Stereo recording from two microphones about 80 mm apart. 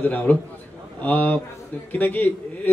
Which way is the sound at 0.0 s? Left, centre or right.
Left.